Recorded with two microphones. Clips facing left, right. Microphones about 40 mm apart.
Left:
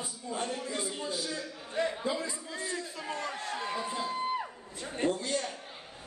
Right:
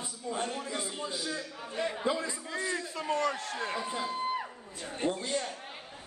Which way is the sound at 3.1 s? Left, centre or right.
Right.